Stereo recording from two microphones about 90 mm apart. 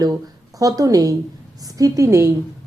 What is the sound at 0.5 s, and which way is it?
A woman's voice, 40° right (ahead or behind).